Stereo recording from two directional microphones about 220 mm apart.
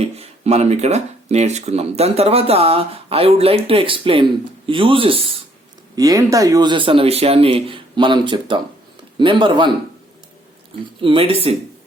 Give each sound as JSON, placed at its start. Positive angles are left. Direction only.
{"t": 0.0, "sound": "speech", "side_deg": -30}
{"t": 11.0, "sound": "speech", "side_deg": -25}